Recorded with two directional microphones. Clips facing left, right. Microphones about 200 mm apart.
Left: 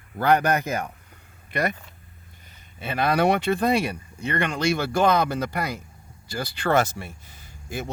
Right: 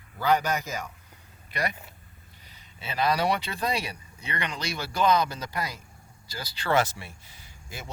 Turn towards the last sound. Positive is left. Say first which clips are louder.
# left 10 dB
turn(degrees=55)  # may be behind; listen again after turning